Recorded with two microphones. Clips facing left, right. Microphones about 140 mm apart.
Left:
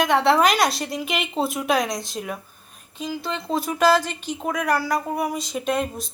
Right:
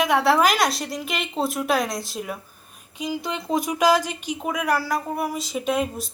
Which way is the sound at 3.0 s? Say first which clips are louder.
Right 1 dB; 15° right (ahead or behind).